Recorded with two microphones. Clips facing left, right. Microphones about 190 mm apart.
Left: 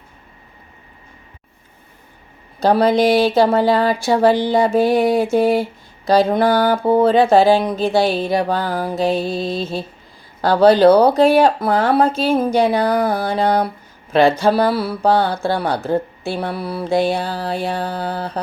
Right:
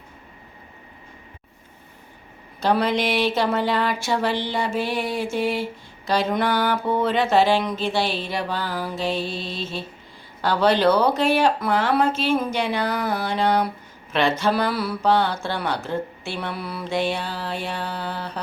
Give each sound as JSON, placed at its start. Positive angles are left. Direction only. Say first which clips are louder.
{"t": 2.6, "sound": "music", "louder": "left 7 dB", "side_deg": 35}